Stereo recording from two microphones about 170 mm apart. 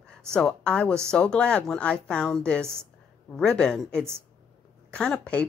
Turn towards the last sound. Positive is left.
turn(degrees=5)  # may be behind; listen again after turning